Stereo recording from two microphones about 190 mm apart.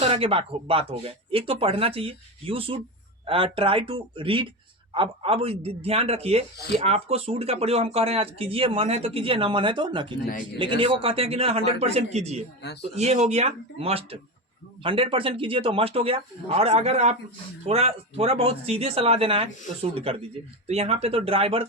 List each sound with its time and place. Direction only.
0.1 s speech: 30° right (ahead or behind)